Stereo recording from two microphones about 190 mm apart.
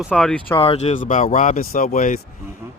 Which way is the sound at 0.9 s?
45° left (ahead or behind).